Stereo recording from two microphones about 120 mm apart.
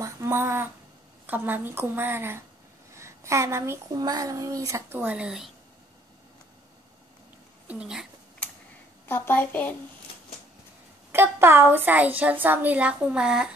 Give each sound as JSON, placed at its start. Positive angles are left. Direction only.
{"t": 0.0, "sound": "a sound", "side_deg": -20}
{"t": 1.2, "sound": "a woman's voice", "side_deg": -15}
{"t": 2.9, "sound": "a sound", "side_deg": -25}
{"t": 3.9, "sound": "speech", "side_deg": -35}
{"t": 7.6, "sound": "speech", "side_deg": -10}
{"t": 9.1, "sound": "speech", "side_deg": 15}
{"t": 11.1, "sound": "a woman's voice", "side_deg": -20}